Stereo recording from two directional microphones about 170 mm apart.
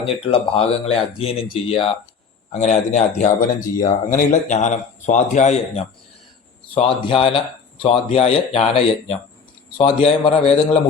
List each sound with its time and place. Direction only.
0.0 s speech: 35° left (ahead or behind)
2.5 s speech: 45° left (ahead or behind)
3.8 s speech: 25° left (ahead or behind)
4.2 s speech: 45° left (ahead or behind)
6.7 s speech: 30° left (ahead or behind)